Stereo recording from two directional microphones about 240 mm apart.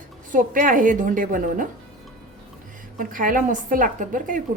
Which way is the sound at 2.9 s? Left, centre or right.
Right.